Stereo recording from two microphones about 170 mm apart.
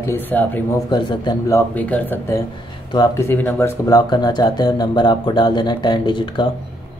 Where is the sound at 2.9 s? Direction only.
25° left (ahead or behind).